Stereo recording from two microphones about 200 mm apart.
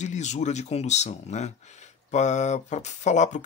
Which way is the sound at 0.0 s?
35° left (ahead or behind).